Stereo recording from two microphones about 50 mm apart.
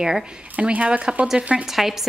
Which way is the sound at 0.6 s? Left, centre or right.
Right.